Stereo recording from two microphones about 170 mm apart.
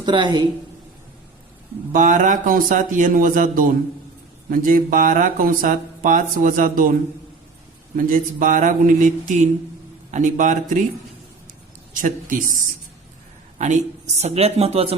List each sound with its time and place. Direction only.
0.0 s a woman's voice: 25° right (ahead or behind)
1.9 s speech: 50° right (ahead or behind)
7.9 s speech: 55° right (ahead or behind)
12.0 s speech: 50° right (ahead or behind); by 14.9 s 35° right (ahead or behind)